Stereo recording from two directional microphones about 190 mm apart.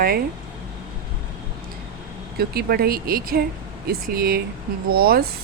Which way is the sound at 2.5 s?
55° right (ahead or behind).